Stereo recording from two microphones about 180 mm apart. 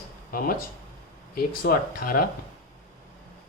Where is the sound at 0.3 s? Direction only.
55° left (ahead or behind).